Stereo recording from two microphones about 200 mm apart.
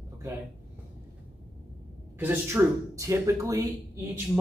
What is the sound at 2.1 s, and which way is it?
Speech, 10° right (ahead or behind).